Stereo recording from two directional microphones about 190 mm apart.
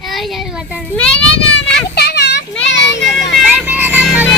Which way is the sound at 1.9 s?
60° left (ahead or behind).